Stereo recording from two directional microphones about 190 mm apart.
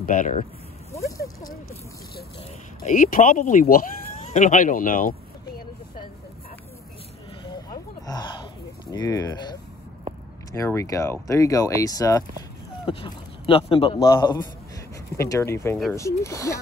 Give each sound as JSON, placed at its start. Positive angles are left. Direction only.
{"t": 0.0, "sound": "speech", "side_deg": 45}
{"t": 1.1, "sound": "speech", "side_deg": 15}
{"t": 2.8, "sound": "speech", "side_deg": 45}
{"t": 7.4, "sound": "a sound", "side_deg": 20}
{"t": 8.9, "sound": "speech", "side_deg": 20}